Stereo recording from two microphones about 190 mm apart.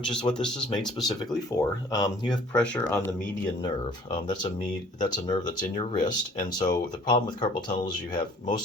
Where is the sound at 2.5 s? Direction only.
5° left (ahead or behind).